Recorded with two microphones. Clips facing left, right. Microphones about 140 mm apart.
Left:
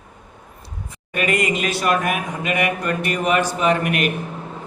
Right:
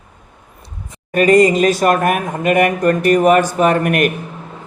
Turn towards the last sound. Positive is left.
turn(degrees=-50)  # may be behind; listen again after turning